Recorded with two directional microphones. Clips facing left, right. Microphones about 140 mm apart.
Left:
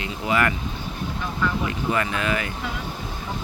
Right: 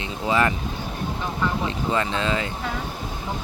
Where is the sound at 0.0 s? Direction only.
20° right (ahead or behind).